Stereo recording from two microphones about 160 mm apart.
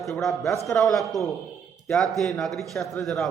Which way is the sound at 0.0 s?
Centre (ahead or behind).